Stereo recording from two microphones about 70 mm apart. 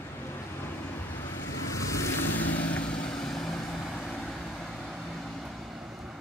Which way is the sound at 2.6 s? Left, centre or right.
Centre.